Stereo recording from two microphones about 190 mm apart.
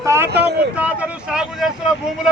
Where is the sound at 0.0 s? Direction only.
15° right (ahead or behind).